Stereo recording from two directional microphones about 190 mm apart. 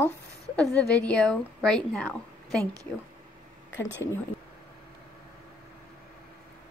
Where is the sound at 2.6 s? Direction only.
15° right (ahead or behind).